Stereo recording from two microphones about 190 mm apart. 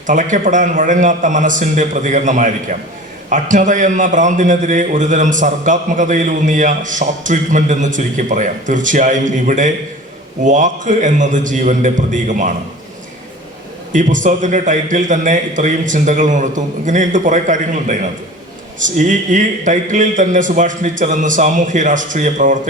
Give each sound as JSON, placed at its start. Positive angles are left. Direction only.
{"t": 0.1, "sound": "a man's voice", "side_deg": -40}
{"t": 13.9, "sound": "a man's voice", "side_deg": -40}